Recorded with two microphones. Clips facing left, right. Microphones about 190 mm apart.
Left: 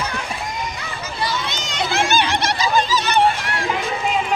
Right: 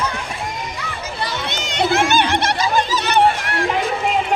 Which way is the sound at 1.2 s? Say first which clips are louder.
Left 1 dB; 60° right (ahead or behind).